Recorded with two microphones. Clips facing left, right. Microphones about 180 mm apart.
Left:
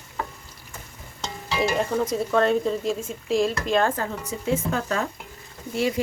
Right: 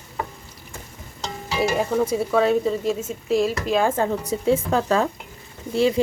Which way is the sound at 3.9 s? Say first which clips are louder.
Right 7 dB; 30° right (ahead or behind).